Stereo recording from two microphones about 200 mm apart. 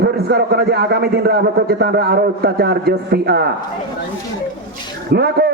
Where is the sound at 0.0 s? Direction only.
55° right (ahead or behind).